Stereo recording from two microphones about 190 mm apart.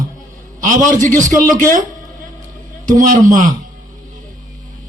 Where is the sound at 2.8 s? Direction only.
45° right (ahead or behind).